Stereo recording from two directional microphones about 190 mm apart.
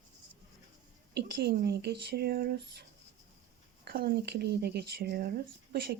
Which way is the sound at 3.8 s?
50° right (ahead or behind).